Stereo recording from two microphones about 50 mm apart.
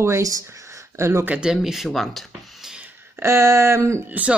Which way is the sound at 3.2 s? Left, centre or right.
Right.